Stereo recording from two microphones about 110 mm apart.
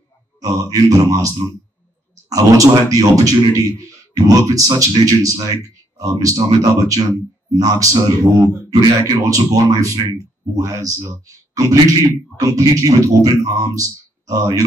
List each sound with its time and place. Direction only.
0.4 s speech: 30° right (ahead or behind)